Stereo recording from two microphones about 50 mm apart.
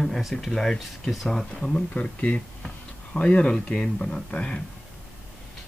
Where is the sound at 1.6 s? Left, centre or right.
Left.